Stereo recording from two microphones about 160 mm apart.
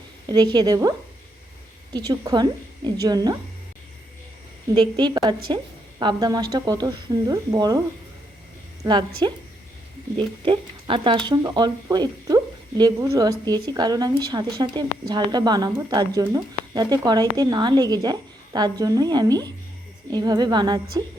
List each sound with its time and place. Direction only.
0.3 s a woman's voice: 25° right (ahead or behind)
4.7 s a woman's voice: 25° right (ahead or behind)
8.8 s a woman's voice: 25° right (ahead or behind)